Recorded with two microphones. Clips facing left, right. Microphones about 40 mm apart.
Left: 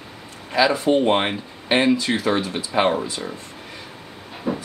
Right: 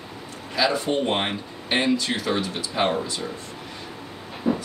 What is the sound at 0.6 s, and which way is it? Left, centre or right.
Speech, centre.